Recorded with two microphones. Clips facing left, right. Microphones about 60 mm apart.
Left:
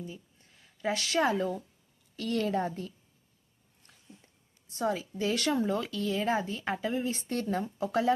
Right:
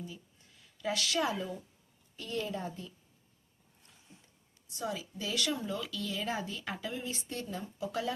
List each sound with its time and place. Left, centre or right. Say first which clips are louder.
0.0 s speech: left 3 dB; left
2.1 s a woman's voice: left 7 dB; left
4.7 s speech: left 7 dB; left
7.3 s speech: left 8 dB; left